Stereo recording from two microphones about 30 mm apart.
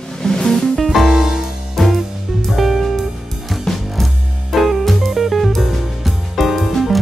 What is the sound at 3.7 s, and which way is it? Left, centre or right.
Music, centre.